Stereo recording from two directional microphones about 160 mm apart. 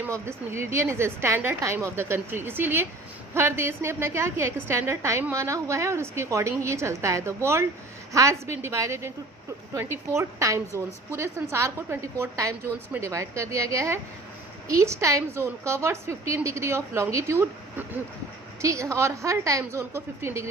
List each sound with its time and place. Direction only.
0.0 s a woman's voice: 15° right (ahead or behind)